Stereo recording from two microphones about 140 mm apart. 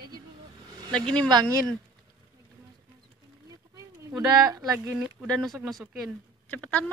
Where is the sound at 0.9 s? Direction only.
5° left (ahead or behind).